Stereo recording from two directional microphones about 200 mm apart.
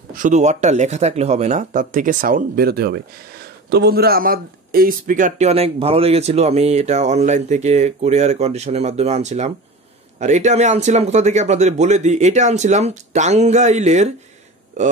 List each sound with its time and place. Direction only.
0.1 s a man's voice: 40° right (ahead or behind)